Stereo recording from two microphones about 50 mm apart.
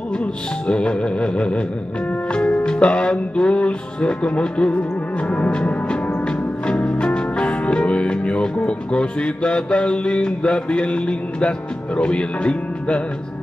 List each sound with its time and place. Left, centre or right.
0.2 s music: left